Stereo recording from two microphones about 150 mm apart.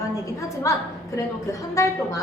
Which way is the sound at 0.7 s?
20° left (ahead or behind).